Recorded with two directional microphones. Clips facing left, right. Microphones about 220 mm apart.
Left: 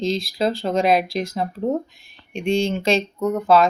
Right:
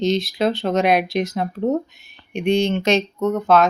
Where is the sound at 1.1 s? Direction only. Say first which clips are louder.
Right 3 dB; 30° left (ahead or behind).